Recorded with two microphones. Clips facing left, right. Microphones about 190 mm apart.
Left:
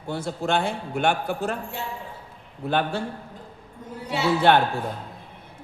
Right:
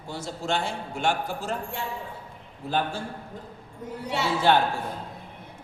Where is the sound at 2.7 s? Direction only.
65° left (ahead or behind).